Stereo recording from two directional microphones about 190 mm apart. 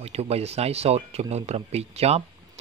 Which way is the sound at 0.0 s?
35° right (ahead or behind).